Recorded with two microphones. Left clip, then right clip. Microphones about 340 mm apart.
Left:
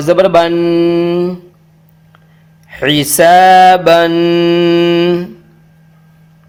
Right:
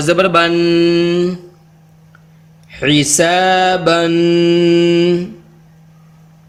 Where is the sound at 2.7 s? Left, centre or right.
Left.